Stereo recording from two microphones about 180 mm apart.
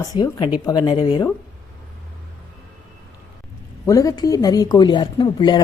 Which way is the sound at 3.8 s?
20° left (ahead or behind).